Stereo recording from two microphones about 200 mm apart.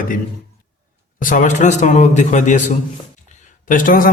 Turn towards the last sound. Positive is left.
turn(degrees=40)  # may be behind; listen again after turning